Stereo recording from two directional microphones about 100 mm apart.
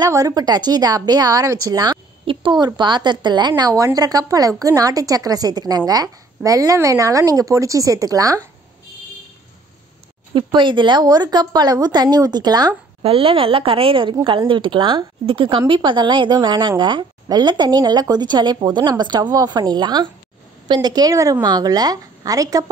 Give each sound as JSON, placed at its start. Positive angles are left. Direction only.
{"t": 0.0, "sound": "a woman's voice", "side_deg": -35}
{"t": 2.3, "sound": "a sound", "side_deg": -60}
{"t": 2.6, "sound": "a woman's voice", "side_deg": -50}
{"t": 10.3, "sound": "a woman's voice", "side_deg": -55}
{"t": 13.0, "sound": "a woman's voice", "side_deg": -70}